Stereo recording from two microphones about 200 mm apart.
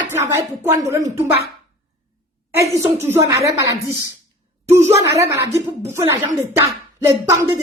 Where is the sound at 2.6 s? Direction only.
15° right (ahead or behind).